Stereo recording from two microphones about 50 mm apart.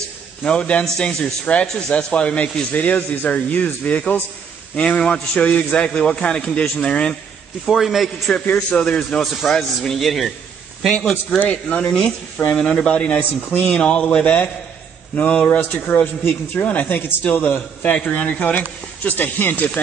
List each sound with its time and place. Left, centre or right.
0.4 s a man's voice: left
7.6 s a man's voice: centre
8.5 s a man's voice: left
9.2 s a man's voice: centre
11.0 s a man's voice: centre
11.3 s a man's voice: left
16.9 s a man's voice: left